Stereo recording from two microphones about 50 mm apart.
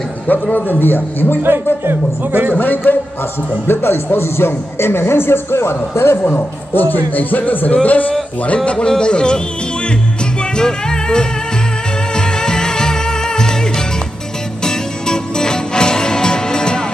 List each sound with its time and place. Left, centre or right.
0.3 s a man's voice: left
1.9 s speech: right
2.6 s a man's voice: left
3.6 s a man's voice: left
8.6 s speech: centre
10.5 s music: centre
14.6 s music: centre